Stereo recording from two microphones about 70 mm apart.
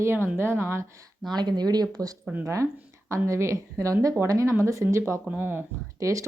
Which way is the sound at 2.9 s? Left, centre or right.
Right.